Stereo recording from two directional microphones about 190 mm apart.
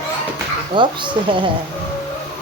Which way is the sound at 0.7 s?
25° right (ahead or behind).